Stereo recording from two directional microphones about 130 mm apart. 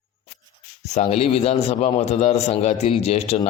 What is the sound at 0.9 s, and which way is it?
A man's voice, 55° left (ahead or behind).